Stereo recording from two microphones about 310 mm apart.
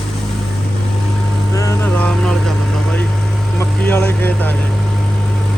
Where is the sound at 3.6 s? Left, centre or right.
Centre.